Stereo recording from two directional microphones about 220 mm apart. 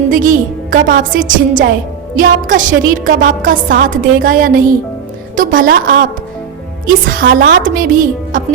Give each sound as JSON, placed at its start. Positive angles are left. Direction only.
{"t": 0.1, "sound": "a woman's voice", "side_deg": -40}